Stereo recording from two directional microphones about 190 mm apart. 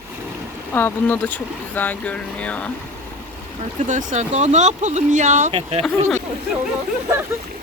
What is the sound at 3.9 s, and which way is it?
Speech, 40° right (ahead or behind).